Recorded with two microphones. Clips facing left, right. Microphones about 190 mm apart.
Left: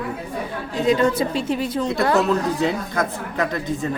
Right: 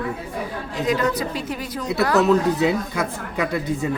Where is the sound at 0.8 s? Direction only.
25° left (ahead or behind).